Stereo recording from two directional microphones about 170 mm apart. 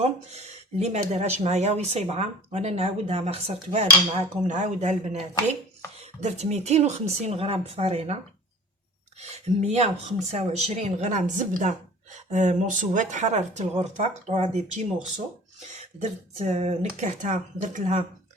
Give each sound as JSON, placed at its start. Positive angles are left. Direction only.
{"t": 0.0, "sound": "speech", "side_deg": -40}
{"t": 9.6, "sound": "speech", "side_deg": -40}
{"t": 16.0, "sound": "speech", "side_deg": -40}